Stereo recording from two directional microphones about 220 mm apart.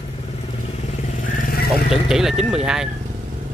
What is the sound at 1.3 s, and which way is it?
Vehicle, 40° left (ahead or behind).